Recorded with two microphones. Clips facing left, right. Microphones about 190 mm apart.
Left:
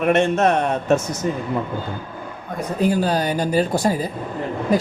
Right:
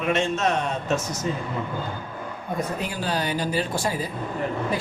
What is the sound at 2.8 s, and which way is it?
Speech, 40° left (ahead or behind).